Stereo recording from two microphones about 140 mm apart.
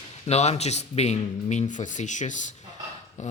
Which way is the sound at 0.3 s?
50° left (ahead or behind).